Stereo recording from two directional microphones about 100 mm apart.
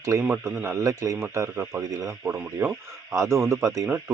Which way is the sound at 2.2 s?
20° right (ahead or behind).